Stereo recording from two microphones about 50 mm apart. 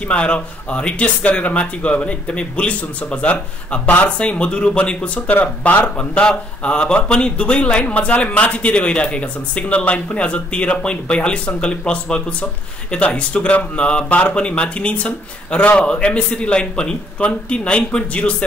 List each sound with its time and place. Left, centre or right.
0.0 s speech: left